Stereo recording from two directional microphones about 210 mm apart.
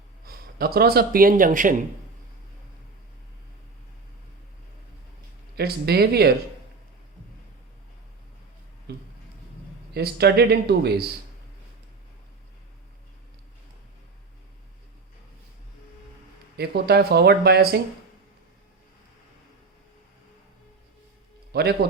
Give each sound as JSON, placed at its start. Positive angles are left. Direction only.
{"t": 0.3, "sound": "speech", "side_deg": -45}
{"t": 5.5, "sound": "speech", "side_deg": -50}
{"t": 8.9, "sound": "a sound", "side_deg": -50}
{"t": 9.9, "sound": "speech", "side_deg": -50}
{"t": 16.6, "sound": "speech", "side_deg": -50}
{"t": 21.5, "sound": "speech", "side_deg": -50}